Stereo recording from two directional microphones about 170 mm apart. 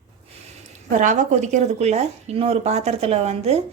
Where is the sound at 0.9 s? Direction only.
50° right (ahead or behind).